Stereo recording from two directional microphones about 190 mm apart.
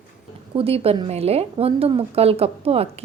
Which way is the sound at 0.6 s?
30° right (ahead or behind).